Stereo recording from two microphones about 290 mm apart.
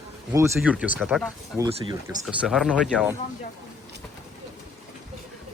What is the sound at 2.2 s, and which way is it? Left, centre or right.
Speech, centre.